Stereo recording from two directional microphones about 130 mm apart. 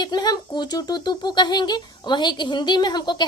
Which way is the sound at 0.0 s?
30° left (ahead or behind).